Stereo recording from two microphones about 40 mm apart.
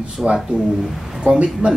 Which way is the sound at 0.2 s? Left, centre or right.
Right.